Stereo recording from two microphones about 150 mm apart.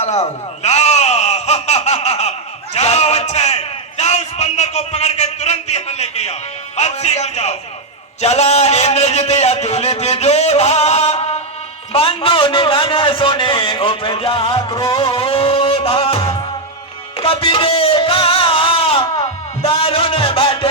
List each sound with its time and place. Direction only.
0.0 s a sound: 45° left (ahead or behind)
6.7 s a man's voice: 45° left (ahead or behind)
14.9 s music: 40° left (ahead or behind)